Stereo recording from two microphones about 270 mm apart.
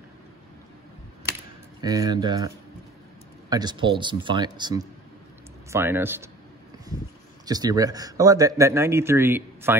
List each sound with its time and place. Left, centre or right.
1.8 s speech: centre
7.4 s speech: centre